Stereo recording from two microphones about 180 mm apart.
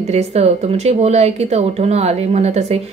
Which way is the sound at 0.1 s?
35° right (ahead or behind).